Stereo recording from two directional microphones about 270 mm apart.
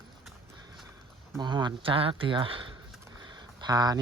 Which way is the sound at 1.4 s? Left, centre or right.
Centre.